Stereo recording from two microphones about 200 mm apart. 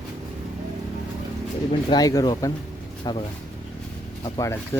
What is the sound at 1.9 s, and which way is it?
Speech, 20° left (ahead or behind).